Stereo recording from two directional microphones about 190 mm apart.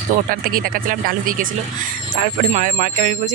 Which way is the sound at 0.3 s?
50° right (ahead or behind).